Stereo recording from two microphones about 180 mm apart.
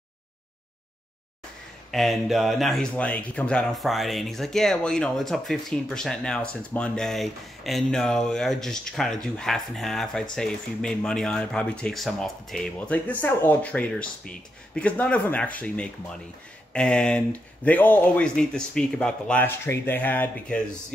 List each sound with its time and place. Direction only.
1.9 s speech: centre (ahead or behind)